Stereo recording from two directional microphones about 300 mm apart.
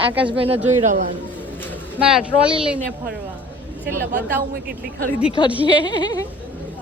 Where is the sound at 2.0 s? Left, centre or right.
Centre.